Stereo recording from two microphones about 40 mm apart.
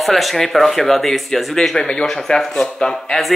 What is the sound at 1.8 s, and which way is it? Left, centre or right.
Speech, left.